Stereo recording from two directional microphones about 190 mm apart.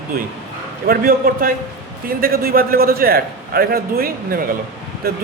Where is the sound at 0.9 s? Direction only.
50° right (ahead or behind).